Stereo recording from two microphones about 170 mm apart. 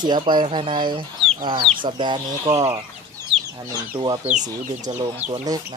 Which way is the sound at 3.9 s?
30° right (ahead or behind).